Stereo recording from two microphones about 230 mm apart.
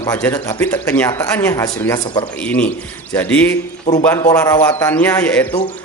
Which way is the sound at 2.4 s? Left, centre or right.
Centre.